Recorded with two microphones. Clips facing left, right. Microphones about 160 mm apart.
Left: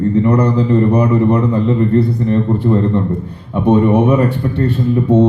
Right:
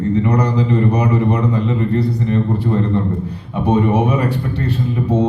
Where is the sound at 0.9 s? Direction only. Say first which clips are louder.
Left 4 dB; 50° left (ahead or behind).